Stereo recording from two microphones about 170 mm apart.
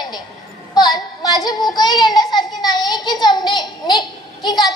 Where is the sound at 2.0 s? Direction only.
25° left (ahead or behind).